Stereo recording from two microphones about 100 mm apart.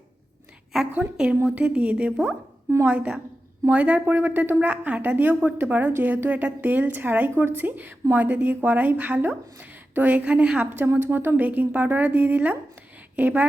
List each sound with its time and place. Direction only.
0.9 s a woman's voice: 10° right (ahead or behind)